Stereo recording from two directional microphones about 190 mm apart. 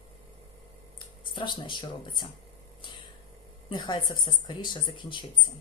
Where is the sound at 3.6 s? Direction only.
25° left (ahead or behind).